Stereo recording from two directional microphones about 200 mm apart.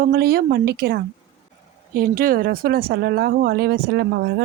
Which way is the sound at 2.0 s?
45° right (ahead or behind).